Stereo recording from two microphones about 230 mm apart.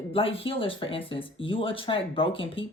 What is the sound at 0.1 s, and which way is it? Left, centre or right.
Speech, left.